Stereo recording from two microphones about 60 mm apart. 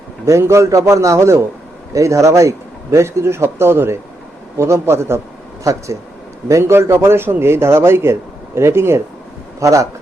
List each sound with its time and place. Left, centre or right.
0.3 s speech: right
6.5 s speech: right
9.6 s speech: right